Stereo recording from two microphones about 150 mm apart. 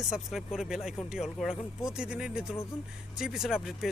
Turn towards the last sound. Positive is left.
turn(degrees=-5)  # may be behind; listen again after turning